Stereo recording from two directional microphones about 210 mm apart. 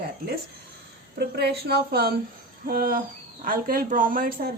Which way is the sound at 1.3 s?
50° right (ahead or behind).